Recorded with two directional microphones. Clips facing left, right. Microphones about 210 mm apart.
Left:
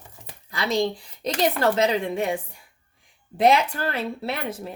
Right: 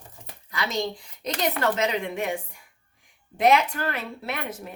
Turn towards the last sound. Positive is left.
turn(degrees=30)  # may be behind; listen again after turning